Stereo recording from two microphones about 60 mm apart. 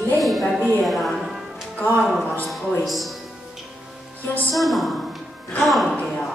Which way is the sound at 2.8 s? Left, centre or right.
Centre.